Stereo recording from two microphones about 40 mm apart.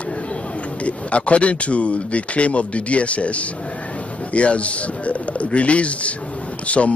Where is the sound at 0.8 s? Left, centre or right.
Left.